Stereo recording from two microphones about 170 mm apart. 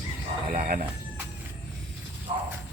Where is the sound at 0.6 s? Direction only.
55° right (ahead or behind).